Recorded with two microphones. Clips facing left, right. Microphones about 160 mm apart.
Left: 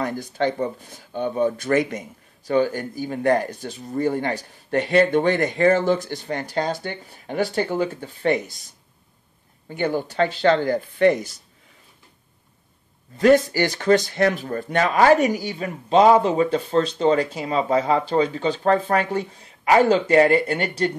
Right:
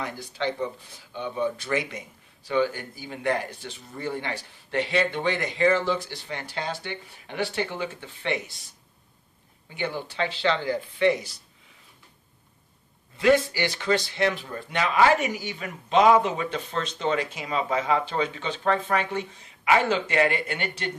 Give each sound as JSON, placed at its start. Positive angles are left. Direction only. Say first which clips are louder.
{"t": 0.0, "sound": "speech", "louder": "left 7 dB", "side_deg": 45}
{"t": 9.7, "sound": "speech", "louder": "left 7 dB", "side_deg": 45}
{"t": 13.2, "sound": "speech", "louder": "left 5 dB", "side_deg": 45}